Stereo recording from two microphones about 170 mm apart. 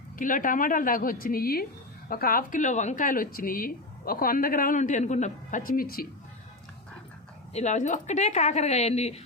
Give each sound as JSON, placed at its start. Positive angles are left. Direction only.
{"t": 0.2, "sound": "a woman's voice", "side_deg": 50}
{"t": 7.5, "sound": "speech", "side_deg": 45}